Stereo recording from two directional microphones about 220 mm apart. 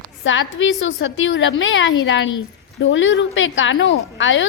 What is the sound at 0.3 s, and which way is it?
A woman's voice, 60° left (ahead or behind).